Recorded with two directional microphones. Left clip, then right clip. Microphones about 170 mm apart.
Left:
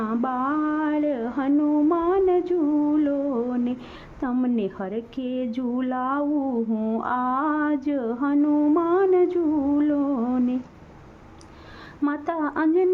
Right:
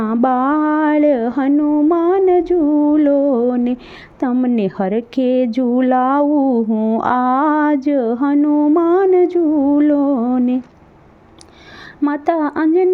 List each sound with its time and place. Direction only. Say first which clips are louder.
0.0 s a sound: right 10 dB; 40° right (ahead or behind)
1.6 s music: right 7 dB; 40° right (ahead or behind)
4.2 s a woman's voice: right 8 dB; 35° right (ahead or behind)
6.7 s a sound: right 9 dB; 25° right (ahead or behind)
7.0 s a woman's voice: right 9 dB; 40° right (ahead or behind); by 8.8 s 25° right (ahead or behind)
8.8 s a woman's voice: right 8 dB; 40° right (ahead or behind)
12.0 s a woman's voice: right 9 dB; 35° right (ahead or behind)